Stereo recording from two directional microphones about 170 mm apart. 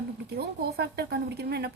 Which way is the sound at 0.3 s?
70° right (ahead or behind).